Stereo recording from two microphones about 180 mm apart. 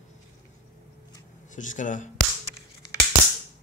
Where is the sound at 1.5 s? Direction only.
45° left (ahead or behind).